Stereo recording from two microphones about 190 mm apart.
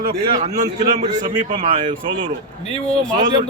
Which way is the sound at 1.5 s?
25° right (ahead or behind).